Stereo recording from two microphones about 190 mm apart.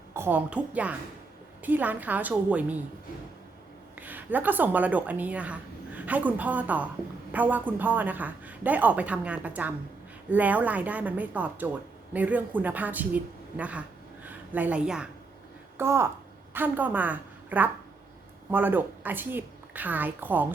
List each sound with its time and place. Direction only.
0.1 s a woman's voice: 10° right (ahead or behind)
3.9 s a woman's voice: 10° right (ahead or behind)